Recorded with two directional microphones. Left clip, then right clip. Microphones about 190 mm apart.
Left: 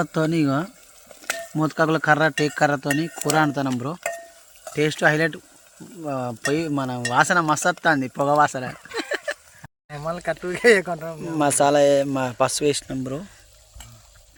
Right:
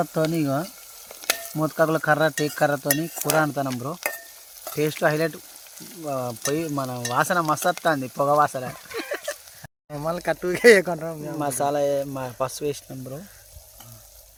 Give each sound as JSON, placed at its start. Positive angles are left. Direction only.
{"t": 0.0, "sound": "speech", "side_deg": 5}
{"t": 1.5, "sound": "stir", "side_deg": 10}
{"t": 4.8, "sound": "stir", "side_deg": 10}
{"t": 7.9, "sound": "speech", "side_deg": 10}
{"t": 9.9, "sound": "speech", "side_deg": -50}
{"t": 11.3, "sound": "speech", "side_deg": 45}